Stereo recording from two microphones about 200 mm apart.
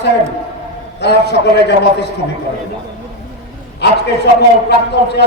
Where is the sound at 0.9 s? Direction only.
55° left (ahead or behind).